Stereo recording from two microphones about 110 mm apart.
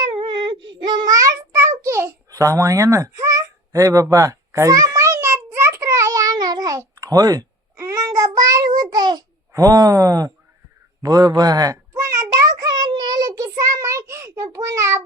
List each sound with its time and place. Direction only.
0.1 s child singing: 50° right (ahead or behind)
9.5 s speech: 35° right (ahead or behind)
12.9 s child singing: 40° right (ahead or behind)